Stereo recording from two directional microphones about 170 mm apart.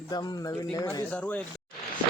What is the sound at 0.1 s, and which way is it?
Speech, 20° left (ahead or behind).